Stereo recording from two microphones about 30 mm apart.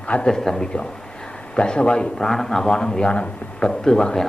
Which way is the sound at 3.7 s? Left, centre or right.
Left.